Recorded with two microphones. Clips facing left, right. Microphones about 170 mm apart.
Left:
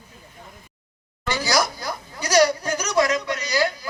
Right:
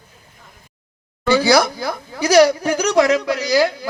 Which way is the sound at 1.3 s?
65° right (ahead or behind).